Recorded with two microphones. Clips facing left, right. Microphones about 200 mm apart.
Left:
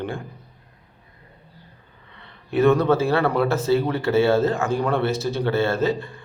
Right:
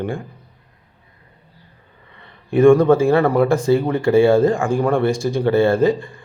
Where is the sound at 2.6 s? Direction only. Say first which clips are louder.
Right 6 dB; 10° right (ahead or behind).